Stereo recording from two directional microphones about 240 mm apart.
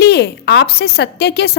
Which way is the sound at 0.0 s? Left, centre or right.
Left.